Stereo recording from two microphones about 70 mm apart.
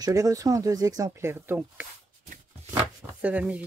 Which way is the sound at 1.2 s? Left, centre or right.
Right.